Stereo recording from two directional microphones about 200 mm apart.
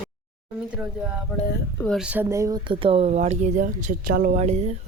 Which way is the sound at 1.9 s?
5° right (ahead or behind).